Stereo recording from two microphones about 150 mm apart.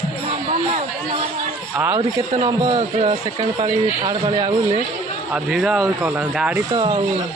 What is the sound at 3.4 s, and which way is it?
Speech, 30° right (ahead or behind).